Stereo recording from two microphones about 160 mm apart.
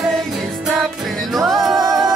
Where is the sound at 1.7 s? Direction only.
20° right (ahead or behind).